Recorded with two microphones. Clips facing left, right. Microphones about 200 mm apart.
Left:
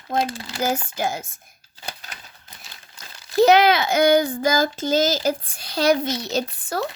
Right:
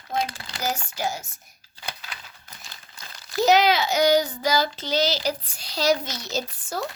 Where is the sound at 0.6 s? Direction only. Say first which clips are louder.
Left 5 dB; 55° left (ahead or behind).